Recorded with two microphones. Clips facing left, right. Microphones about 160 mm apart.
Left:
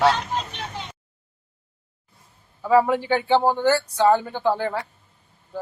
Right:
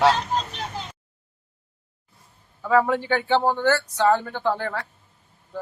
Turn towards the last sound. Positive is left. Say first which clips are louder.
# left 2 dB
turn(degrees=15)  # may be behind; listen again after turning